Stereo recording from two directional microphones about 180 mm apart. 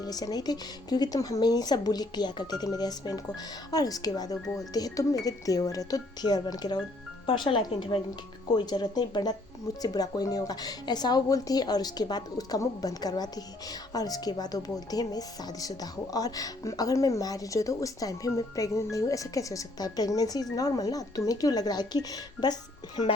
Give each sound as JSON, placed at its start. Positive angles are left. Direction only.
{"t": 0.0, "sound": "a woman's voice", "side_deg": 20}